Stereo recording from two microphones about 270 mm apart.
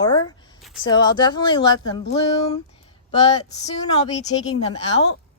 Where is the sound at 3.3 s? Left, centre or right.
Left.